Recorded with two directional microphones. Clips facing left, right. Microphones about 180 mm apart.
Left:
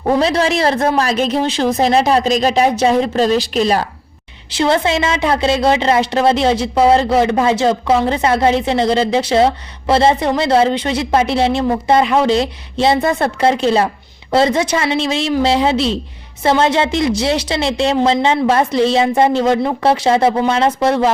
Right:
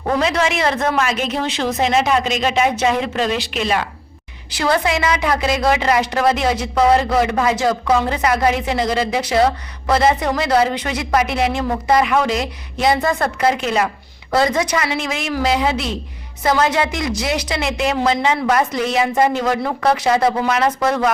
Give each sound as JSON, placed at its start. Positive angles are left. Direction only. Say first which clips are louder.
{"t": 0.0, "sound": "a woman's voice", "louder": "left 4 dB", "side_deg": 30}
{"t": 4.5, "sound": "a woman's voice", "louder": "left 3 dB", "side_deg": 25}